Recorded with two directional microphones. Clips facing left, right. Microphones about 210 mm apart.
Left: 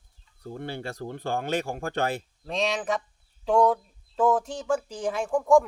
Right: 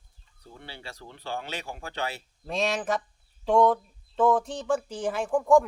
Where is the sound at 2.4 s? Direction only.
Centre (ahead or behind).